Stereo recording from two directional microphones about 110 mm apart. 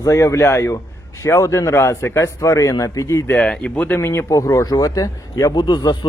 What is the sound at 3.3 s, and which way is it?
A man's voice, 10° left (ahead or behind).